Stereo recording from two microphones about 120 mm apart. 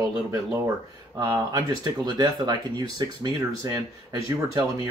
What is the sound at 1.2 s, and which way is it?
Speech, 35° right (ahead or behind).